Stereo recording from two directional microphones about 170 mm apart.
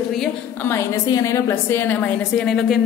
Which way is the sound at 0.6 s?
20° left (ahead or behind).